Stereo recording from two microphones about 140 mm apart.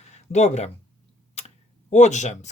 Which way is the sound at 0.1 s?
55° left (ahead or behind).